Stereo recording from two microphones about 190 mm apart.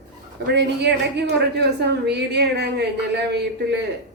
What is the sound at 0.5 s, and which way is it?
A woman's voice, 60° right (ahead or behind).